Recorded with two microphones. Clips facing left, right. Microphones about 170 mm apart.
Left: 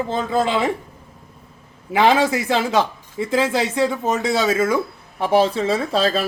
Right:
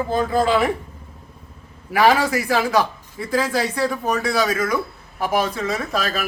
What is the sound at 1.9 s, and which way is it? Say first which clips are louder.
Speech: left 1 dB; 20° left (ahead or behind).